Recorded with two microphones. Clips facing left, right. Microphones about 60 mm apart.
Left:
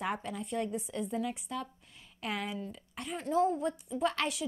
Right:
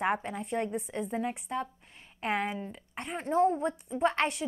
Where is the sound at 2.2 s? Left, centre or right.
Right.